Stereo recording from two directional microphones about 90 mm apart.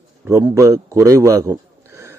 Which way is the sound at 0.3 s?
35° right (ahead or behind).